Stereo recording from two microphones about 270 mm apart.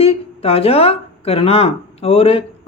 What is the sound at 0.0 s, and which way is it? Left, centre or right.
Speech, left.